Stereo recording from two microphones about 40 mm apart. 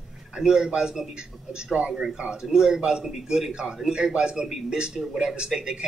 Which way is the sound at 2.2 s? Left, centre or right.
Centre.